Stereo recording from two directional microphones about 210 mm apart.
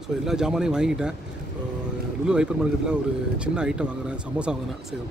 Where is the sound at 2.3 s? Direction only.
5° right (ahead or behind).